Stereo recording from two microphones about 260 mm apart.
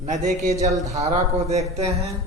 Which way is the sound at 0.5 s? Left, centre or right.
Centre.